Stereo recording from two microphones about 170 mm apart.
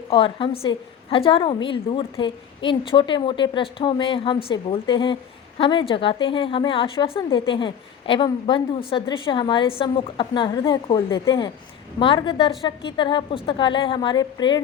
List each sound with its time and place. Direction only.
0.1 s a woman's voice: 30° left (ahead or behind)